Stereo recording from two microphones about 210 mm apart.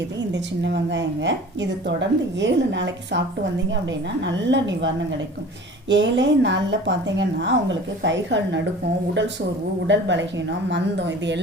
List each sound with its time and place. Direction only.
0.3 s speech: 60° right (ahead or behind)
9.8 s speech: 60° right (ahead or behind)